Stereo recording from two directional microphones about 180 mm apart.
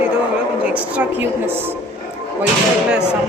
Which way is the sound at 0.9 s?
10° right (ahead or behind).